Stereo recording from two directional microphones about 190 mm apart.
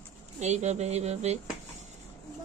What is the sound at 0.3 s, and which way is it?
Speech, 35° right (ahead or behind).